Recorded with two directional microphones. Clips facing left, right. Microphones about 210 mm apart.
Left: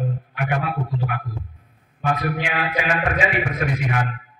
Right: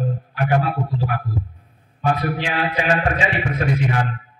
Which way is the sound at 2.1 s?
30° right (ahead or behind).